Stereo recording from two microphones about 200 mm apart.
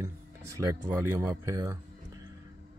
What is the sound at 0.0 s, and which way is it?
Speech, 15° right (ahead or behind).